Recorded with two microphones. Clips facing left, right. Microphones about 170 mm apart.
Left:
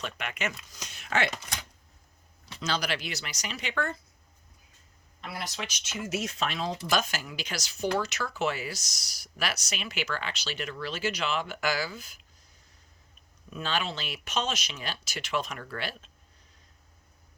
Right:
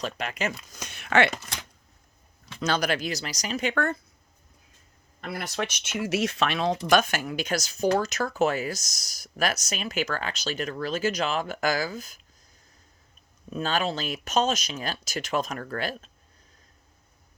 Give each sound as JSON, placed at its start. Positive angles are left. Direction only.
{"t": 0.0, "sound": "speech", "side_deg": -35}
{"t": 0.8, "sound": "speech", "side_deg": -60}
{"t": 2.6, "sound": "speech", "side_deg": -50}
{"t": 5.2, "sound": "speech", "side_deg": -55}
{"t": 6.1, "sound": "speech", "side_deg": -75}
{"t": 13.5, "sound": "speech", "side_deg": -45}